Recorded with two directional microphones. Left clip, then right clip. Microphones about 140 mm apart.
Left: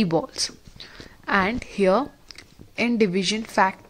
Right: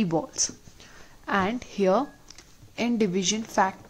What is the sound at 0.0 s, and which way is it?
A woman's voice, 15° left (ahead or behind).